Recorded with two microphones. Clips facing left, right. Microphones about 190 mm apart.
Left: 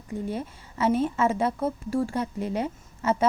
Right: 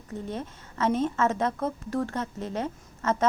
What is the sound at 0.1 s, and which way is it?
A woman's voice, 10° left (ahead or behind).